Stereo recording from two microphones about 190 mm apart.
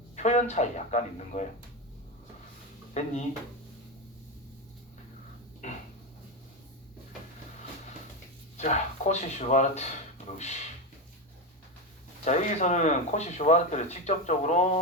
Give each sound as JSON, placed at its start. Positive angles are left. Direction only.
{"t": 0.2, "sound": "speech", "side_deg": 35}
{"t": 2.9, "sound": "speech", "side_deg": 40}
{"t": 5.6, "sound": "a sound", "side_deg": 40}
{"t": 8.5, "sound": "speech", "side_deg": 35}
{"t": 12.2, "sound": "speech", "side_deg": 40}